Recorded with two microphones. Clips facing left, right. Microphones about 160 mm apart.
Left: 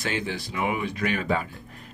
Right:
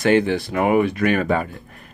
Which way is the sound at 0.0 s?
60° right (ahead or behind).